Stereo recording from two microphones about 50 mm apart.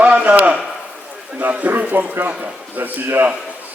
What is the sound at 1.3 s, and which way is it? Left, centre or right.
A man's voice, right.